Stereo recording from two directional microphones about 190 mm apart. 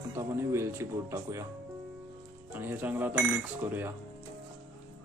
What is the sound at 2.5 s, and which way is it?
Speech, 10° right (ahead or behind).